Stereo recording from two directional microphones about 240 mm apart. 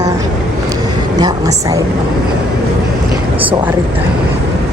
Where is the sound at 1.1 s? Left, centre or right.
Centre.